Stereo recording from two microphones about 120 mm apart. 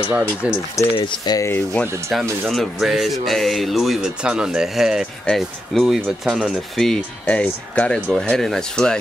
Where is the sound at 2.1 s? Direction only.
Centre (ahead or behind).